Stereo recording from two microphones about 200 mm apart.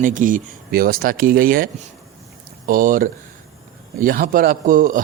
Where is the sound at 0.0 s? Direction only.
40° right (ahead or behind).